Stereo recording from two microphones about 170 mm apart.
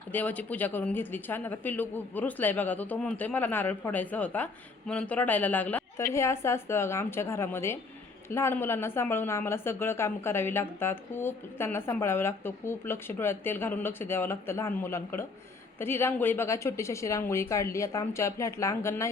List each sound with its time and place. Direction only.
0.1 s a woman's voice: 10° left (ahead or behind)